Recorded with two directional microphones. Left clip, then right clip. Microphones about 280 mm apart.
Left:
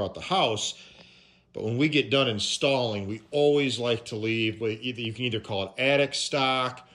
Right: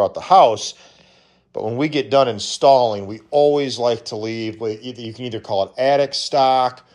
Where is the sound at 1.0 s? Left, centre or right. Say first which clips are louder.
Right 2 dB; left.